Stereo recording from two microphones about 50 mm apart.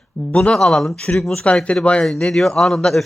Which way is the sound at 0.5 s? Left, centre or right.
Centre.